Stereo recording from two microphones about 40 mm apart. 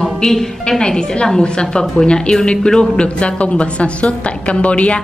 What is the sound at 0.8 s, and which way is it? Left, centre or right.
A woman's voice, centre.